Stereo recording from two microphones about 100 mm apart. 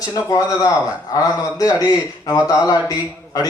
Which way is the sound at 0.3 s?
40° left (ahead or behind).